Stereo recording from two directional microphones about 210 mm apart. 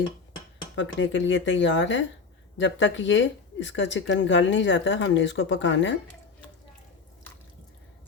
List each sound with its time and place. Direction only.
0.8 s speech: 60° left (ahead or behind)